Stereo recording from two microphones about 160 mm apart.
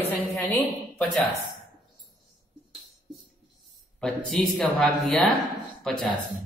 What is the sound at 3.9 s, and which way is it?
Speech, 5° left (ahead or behind).